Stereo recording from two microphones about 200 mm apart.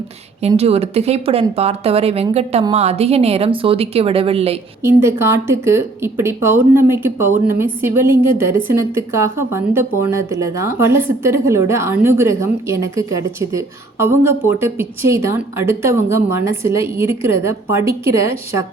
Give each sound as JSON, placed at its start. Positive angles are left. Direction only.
{"t": 0.4, "sound": "a woman's voice", "side_deg": -30}
{"t": 4.8, "sound": "a woman's voice", "side_deg": -15}